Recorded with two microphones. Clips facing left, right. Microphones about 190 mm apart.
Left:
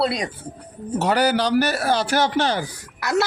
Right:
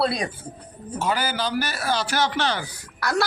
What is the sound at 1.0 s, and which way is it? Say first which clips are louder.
Speech: left 6 dB; 70° left (ahead or behind).